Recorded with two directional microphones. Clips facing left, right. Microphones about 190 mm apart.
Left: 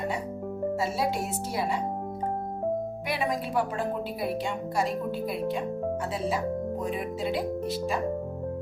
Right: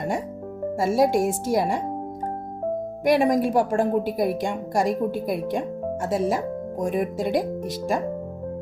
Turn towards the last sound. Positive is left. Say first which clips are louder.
# right 6 dB
turn(degrees=-50)  # may be behind; listen again after turning